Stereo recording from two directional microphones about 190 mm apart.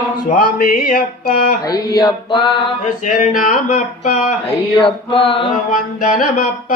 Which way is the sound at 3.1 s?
45° left (ahead or behind).